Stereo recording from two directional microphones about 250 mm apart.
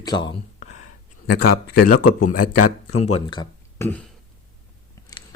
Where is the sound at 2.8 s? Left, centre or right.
Left; by 4.0 s centre.